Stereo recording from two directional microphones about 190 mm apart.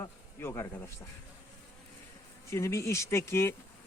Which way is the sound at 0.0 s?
15° left (ahead or behind).